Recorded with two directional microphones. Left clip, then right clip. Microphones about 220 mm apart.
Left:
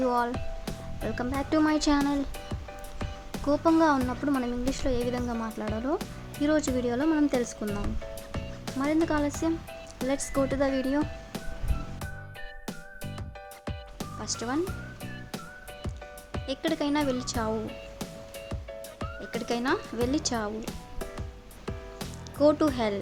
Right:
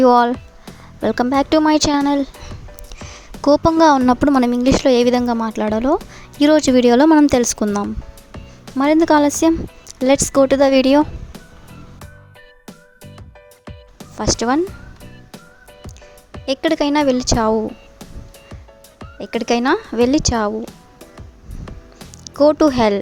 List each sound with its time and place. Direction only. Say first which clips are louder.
0.0 s speech: right 15 dB; 40° right (ahead or behind)
0.3 s music: even; centre (ahead or behind)
1.0 s speech: right 15 dB; 40° right (ahead or behind)
3.4 s a woman's voice: right 11 dB; 40° right (ahead or behind)
8.3 s music: right 4 dB; centre (ahead or behind)
8.8 s a woman's voice: right 14 dB; 45° right (ahead or behind)
14.2 s speech: right 15 dB; 40° right (ahead or behind)
14.6 s music: right 10 dB; centre (ahead or behind)
16.5 s speech: right 12 dB; 40° right (ahead or behind)
19.2 s speech: right 13 dB; 40° right (ahead or behind)
21.6 s music: even; centre (ahead or behind)
22.2 s speech: right 11 dB; 35° right (ahead or behind)